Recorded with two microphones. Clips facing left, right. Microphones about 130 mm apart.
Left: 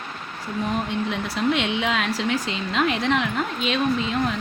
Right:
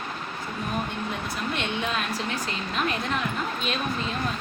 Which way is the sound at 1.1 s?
90° left.